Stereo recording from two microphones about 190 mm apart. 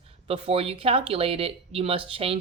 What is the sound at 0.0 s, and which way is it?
Speech, 30° right (ahead or behind).